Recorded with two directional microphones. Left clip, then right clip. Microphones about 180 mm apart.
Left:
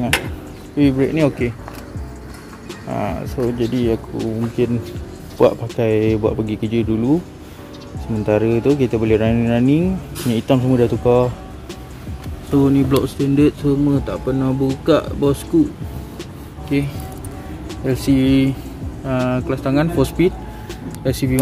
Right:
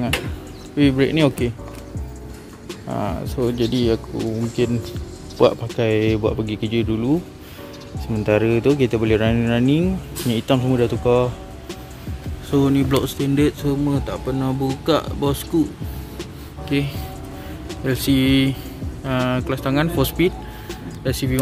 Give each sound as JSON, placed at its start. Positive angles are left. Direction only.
{"t": 0.7, "sound": "speech", "side_deg": -10}
{"t": 2.9, "sound": "speech", "side_deg": -20}
{"t": 3.9, "sound": "speech", "side_deg": 0}
{"t": 12.4, "sound": "speech", "side_deg": 0}
{"t": 16.2, "sound": "music", "side_deg": 0}
{"t": 17.6, "sound": "speech", "side_deg": 0}